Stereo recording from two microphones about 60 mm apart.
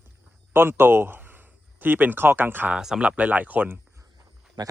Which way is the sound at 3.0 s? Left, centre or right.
Right.